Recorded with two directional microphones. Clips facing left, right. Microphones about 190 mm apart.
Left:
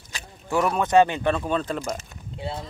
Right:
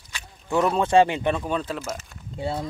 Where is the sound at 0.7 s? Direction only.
30° right (ahead or behind); by 1.8 s 10° right (ahead or behind).